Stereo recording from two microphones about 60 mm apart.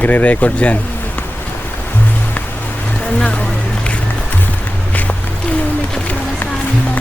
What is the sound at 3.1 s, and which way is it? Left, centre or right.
Speech, left.